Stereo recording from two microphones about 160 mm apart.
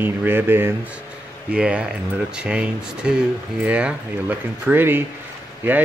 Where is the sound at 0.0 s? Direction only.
10° right (ahead or behind).